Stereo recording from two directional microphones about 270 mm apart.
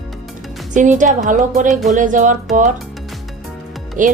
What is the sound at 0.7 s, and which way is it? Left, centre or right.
A woman's voice, right.